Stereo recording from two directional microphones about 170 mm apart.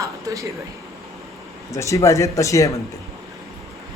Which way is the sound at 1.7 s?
20° left (ahead or behind).